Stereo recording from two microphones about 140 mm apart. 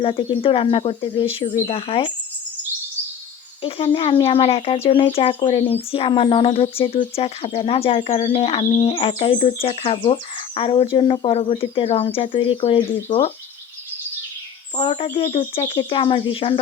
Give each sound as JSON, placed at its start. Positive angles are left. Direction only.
{"t": 0.0, "sound": "speech", "side_deg": 40}
{"t": 3.6, "sound": "speech", "side_deg": 40}
{"t": 14.8, "sound": "speech", "side_deg": 40}